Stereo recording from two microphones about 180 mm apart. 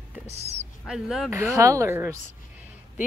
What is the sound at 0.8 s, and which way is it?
Speech, centre (ahead or behind).